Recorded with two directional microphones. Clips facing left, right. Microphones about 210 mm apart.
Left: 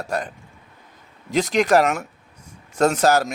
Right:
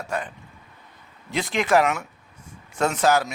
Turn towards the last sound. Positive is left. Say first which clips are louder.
# left 3 dB
turn(degrees=40)  # may be behind; listen again after turning